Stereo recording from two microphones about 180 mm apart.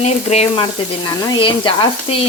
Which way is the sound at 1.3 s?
30° left (ahead or behind).